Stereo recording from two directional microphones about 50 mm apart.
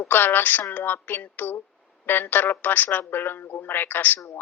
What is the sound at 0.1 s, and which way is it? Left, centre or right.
A woman's voice, left.